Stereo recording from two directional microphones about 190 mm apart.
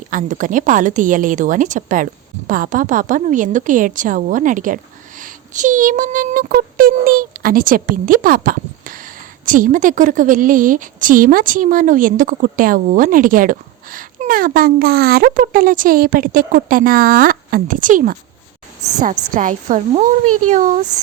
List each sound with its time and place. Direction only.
0.1 s a woman's voice: 45° right (ahead or behind)
19.3 s a woman's voice: 45° right (ahead or behind)